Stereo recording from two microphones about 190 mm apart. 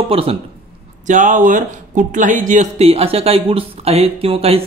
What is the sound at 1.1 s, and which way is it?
Speech, 40° right (ahead or behind).